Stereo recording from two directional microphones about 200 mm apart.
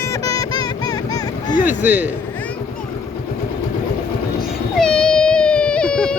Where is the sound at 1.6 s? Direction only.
10° right (ahead or behind).